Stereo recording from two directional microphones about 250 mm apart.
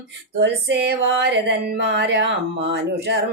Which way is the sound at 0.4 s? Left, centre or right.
Right.